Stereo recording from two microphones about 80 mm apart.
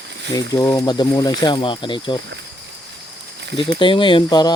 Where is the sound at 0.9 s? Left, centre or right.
Left.